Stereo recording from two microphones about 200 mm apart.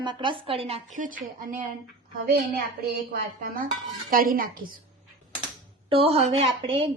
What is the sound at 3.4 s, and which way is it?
Speech, 45° right (ahead or behind).